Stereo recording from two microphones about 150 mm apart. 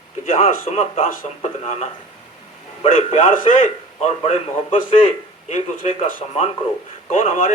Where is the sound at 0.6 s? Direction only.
45° left (ahead or behind).